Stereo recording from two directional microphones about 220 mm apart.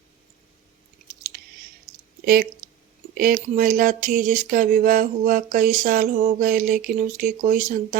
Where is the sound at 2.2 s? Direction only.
40° right (ahead or behind).